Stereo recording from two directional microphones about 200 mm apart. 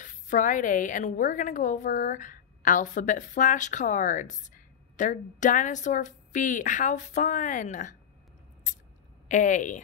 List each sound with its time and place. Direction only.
0.0 s a woman's voice: 40° left (ahead or behind)
9.3 s a woman's voice: 40° left (ahead or behind)